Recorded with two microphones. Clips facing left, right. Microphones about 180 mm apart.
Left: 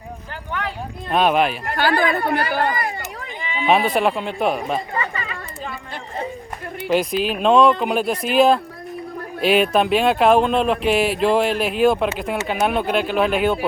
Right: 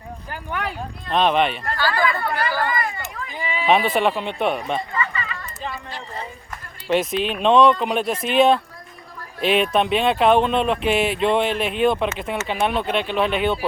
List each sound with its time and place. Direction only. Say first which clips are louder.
1.1 s speech: left 1 dB; 5° left (ahead or behind)
1.7 s speech: left 3 dB; 60° left (ahead or behind)
3.7 s speech: left 1 dB; centre (ahead or behind)
4.9 s chatter: left 1 dB; 50° left (ahead or behind)
6.8 s speech: left 1 dB; centre (ahead or behind)